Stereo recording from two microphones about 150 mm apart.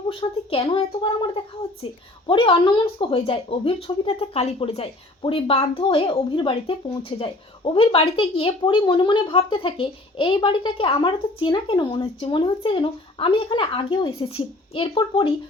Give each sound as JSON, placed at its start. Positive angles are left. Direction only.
{"t": 0.1, "sound": "speech", "side_deg": 35}